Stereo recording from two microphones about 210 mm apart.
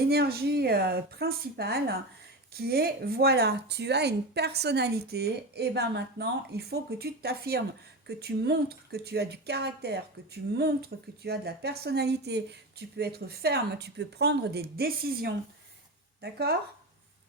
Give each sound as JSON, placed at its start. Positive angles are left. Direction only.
{"t": 0.1, "sound": "speech", "side_deg": -50}